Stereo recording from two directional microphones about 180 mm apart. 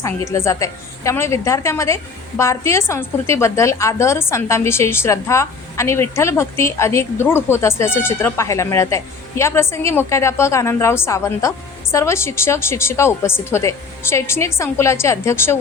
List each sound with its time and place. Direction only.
0.0 s a woman's voice: 15° left (ahead or behind)